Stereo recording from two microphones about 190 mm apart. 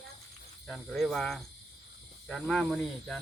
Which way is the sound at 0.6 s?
Centre (ahead or behind).